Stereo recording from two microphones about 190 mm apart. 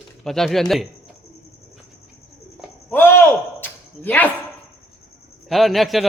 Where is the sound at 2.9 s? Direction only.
10° left (ahead or behind).